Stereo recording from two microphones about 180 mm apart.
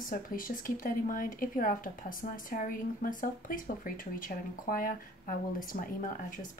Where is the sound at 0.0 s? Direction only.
50° left (ahead or behind).